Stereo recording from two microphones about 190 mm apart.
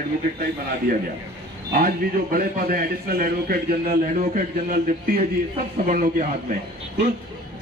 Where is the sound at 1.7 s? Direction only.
50° right (ahead or behind).